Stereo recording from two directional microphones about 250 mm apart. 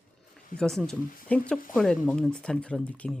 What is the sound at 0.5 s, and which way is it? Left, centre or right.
Speech, centre.